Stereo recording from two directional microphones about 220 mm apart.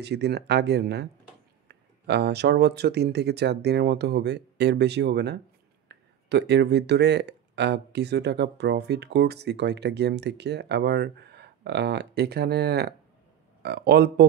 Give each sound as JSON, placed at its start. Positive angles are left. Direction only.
{"t": 0.0, "sound": "speech", "side_deg": -50}